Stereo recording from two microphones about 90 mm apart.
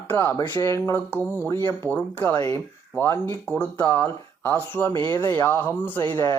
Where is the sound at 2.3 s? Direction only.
30° left (ahead or behind).